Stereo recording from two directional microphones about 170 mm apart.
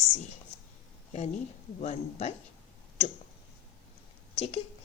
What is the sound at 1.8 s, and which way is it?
Speech, 40° left (ahead or behind).